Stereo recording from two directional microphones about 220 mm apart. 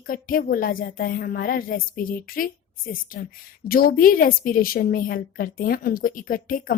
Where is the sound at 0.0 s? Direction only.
40° left (ahead or behind).